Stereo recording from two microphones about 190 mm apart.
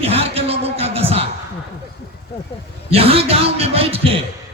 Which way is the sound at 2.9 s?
30° right (ahead or behind).